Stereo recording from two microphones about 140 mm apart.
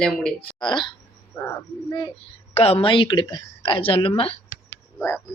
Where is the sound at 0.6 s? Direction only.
35° left (ahead or behind).